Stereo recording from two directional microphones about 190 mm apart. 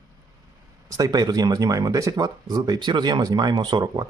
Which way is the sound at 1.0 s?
20° right (ahead or behind).